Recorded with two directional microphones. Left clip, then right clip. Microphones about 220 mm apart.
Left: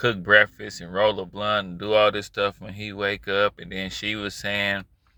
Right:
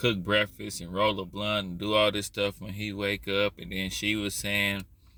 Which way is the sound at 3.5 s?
10° left (ahead or behind).